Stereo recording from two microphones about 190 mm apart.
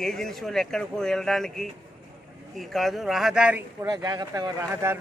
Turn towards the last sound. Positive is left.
turn(degrees=-15)  # may be behind; listen again after turning